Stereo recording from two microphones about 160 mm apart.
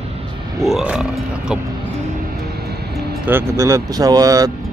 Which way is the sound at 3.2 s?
15° right (ahead or behind).